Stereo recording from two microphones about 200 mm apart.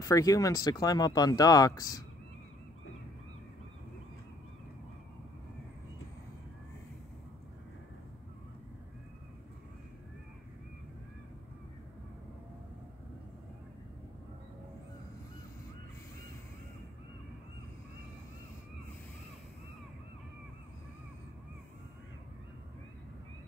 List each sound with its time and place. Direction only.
0.0 s speech: 15° left (ahead or behind)